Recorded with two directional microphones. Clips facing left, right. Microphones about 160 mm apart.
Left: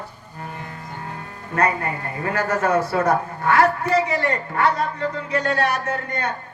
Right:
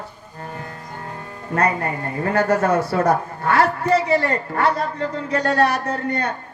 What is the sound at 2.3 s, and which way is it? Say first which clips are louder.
Speech: right 3 dB; 35° right (ahead or behind).